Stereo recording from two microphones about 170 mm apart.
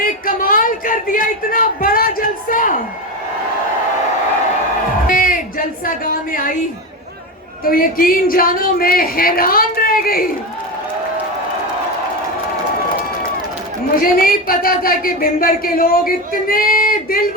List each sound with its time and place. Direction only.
0.3 s a sound: 55° left (ahead or behind)
5.0 s music: 55° left (ahead or behind)
7.6 s speech: 55° left (ahead or behind)
13.9 s speech: 55° left (ahead or behind)